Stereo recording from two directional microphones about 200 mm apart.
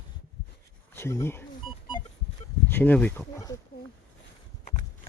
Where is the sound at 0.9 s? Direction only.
10° left (ahead or behind).